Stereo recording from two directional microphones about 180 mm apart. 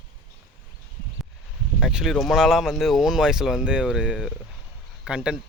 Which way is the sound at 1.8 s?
5° right (ahead or behind).